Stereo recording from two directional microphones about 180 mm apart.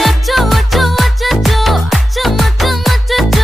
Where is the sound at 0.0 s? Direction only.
Centre (ahead or behind).